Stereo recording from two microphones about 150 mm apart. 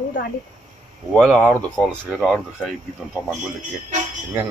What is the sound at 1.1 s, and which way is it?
Speech, 5° right (ahead or behind).